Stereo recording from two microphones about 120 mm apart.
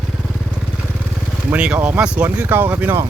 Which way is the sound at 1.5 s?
10° right (ahead or behind).